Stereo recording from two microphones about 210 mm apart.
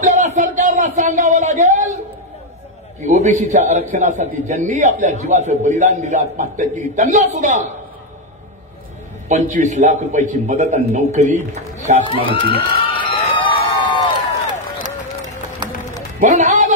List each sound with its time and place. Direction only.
0.0 s a sound: 35° right (ahead or behind)
3.0 s a man's voice: 35° right (ahead or behind)
9.3 s a man's voice: 35° right (ahead or behind)
12.0 s speech: 25° left (ahead or behind)
12.4 s a sound: 25° left (ahead or behind)
16.2 s a man's voice: 35° right (ahead or behind)